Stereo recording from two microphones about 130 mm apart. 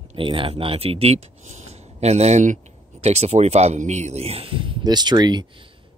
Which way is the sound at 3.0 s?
55° right (ahead or behind).